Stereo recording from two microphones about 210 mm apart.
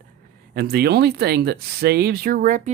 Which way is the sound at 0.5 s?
50° right (ahead or behind).